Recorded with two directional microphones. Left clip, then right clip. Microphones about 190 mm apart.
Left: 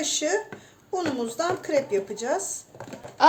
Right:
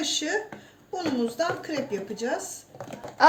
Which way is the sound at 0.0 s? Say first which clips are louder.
Left 2 dB; 55° left (ahead or behind).